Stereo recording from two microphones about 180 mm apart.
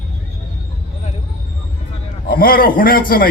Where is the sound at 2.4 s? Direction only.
55° left (ahead or behind).